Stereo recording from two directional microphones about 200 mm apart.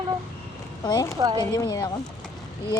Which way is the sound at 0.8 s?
20° left (ahead or behind).